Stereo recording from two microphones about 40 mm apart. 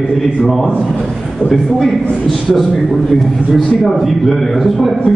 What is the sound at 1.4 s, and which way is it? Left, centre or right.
Speech, left.